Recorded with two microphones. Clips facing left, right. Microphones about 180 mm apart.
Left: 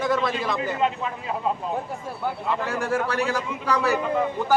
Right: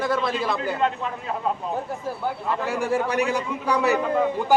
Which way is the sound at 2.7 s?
15° right (ahead or behind).